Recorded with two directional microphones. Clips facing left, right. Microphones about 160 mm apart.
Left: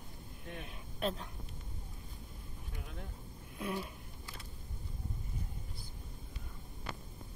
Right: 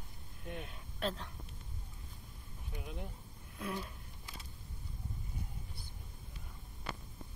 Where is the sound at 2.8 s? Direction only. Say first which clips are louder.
Right 4 dB; 20° right (ahead or behind).